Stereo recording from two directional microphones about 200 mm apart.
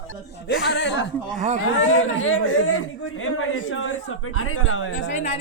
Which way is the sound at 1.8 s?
85° left.